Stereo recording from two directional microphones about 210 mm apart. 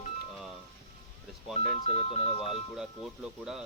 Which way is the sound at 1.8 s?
30° left (ahead or behind).